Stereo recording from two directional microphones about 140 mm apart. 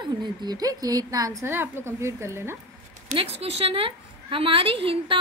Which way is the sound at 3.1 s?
45° right (ahead or behind).